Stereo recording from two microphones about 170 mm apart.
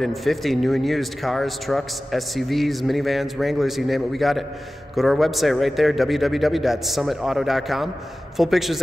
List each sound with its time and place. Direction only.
0.0 s speech: centre (ahead or behind)